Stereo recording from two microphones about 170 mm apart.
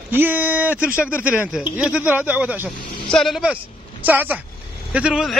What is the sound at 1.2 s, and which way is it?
A man's voice, 5° right (ahead or behind).